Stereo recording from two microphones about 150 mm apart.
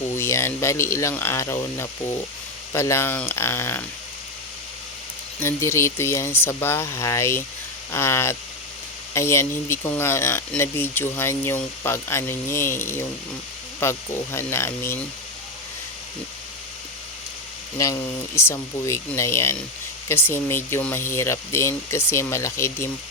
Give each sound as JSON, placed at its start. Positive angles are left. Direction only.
{"t": 0.1, "sound": "speech", "side_deg": 15}
{"t": 5.4, "sound": "speech", "side_deg": 20}
{"t": 18.3, "sound": "speech", "side_deg": 20}